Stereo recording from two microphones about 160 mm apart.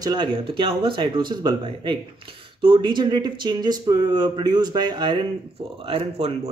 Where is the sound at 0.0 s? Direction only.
30° right (ahead or behind).